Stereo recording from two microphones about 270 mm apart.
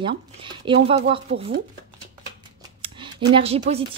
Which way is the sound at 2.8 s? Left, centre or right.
Right.